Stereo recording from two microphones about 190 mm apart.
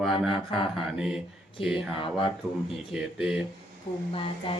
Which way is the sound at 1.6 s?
30° left (ahead or behind).